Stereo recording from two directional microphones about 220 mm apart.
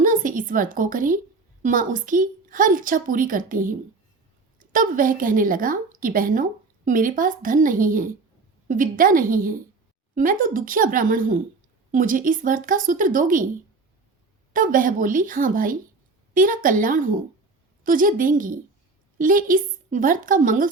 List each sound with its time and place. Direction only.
0.0 s a woman's voice: 35° right (ahead or behind)
14.5 s a woman's voice: 35° right (ahead or behind)